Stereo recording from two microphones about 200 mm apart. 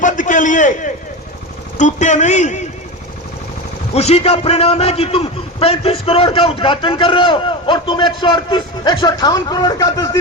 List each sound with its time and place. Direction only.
0.0 s a sound: 40° left (ahead or behind)
1.8 s a man's voice: 35° left (ahead or behind)
3.9 s a man's voice: 30° left (ahead or behind)